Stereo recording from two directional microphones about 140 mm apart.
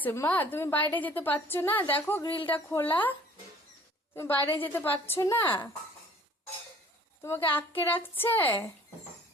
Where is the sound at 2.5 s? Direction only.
15° left (ahead or behind).